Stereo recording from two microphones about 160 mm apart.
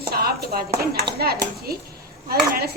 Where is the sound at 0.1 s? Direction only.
75° right (ahead or behind).